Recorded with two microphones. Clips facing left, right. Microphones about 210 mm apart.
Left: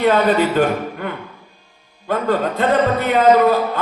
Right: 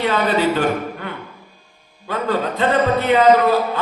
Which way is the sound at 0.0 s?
50° left (ahead or behind).